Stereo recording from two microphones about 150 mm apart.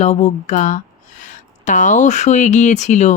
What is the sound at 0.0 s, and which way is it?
Speech, 50° left (ahead or behind).